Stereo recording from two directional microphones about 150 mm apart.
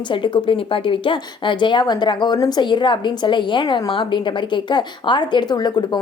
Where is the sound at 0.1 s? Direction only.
35° left (ahead or behind).